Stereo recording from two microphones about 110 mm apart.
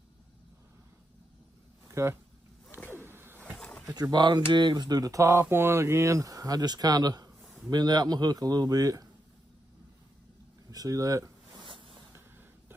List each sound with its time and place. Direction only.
1.9 s speech: 25° right (ahead or behind)
2.7 s a sound: 20° right (ahead or behind)
3.1 s pigeon: 20° right (ahead or behind)
3.5 s pigeon: 10° left (ahead or behind)
3.8 s speech: 35° right (ahead or behind)
10.7 s speech: 35° right (ahead or behind)
11.6 s a sound: 50° right (ahead or behind)